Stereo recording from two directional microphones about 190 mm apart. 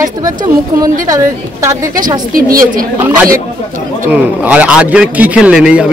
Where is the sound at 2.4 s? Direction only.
50° right (ahead or behind).